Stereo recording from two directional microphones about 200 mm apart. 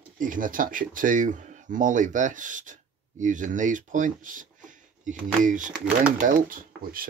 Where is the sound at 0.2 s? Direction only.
40° right (ahead or behind).